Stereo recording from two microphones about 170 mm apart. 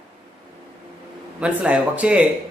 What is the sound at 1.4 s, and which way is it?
Speech, 5° right (ahead or behind).